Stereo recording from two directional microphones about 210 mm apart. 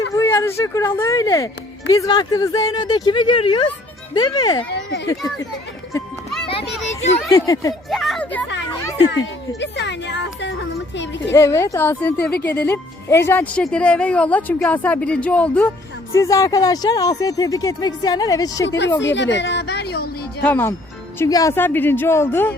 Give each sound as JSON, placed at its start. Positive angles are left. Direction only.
{"t": 0.1, "sound": "speech", "side_deg": 15}
{"t": 4.7, "sound": "speech", "side_deg": 55}
{"t": 6.5, "sound": "a child's voice", "side_deg": 30}
{"t": 7.3, "sound": "speech", "side_deg": 15}
{"t": 7.9, "sound": "speech", "side_deg": 0}
{"t": 9.6, "sound": "a woman's voice", "side_deg": 55}
{"t": 11.3, "sound": "speech", "side_deg": 15}
{"t": 19.0, "sound": "a woman's voice", "side_deg": 60}
{"t": 20.4, "sound": "speech", "side_deg": 10}